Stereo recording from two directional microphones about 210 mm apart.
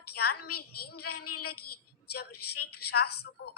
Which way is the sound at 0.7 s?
90° left.